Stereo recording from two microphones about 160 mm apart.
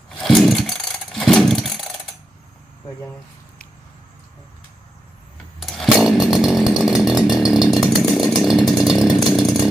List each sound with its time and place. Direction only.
0.2 s vehicle: centre (ahead or behind)
5.5 s chainsaw: centre (ahead or behind)